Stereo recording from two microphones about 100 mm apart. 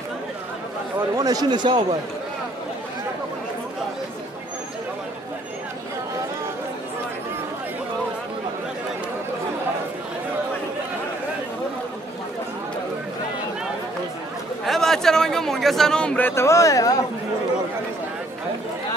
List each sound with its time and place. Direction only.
1.1 s speech: 40° right (ahead or behind)
14.7 s a sound: 5° left (ahead or behind)
16.3 s speech: 30° left (ahead or behind)